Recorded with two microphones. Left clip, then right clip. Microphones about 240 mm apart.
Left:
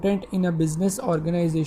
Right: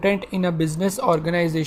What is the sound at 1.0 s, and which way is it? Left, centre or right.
Speech, right.